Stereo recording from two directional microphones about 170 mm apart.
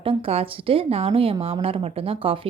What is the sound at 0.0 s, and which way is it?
Speech, 35° right (ahead or behind).